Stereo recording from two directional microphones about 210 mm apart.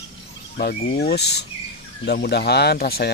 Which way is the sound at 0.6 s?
50° left (ahead or behind).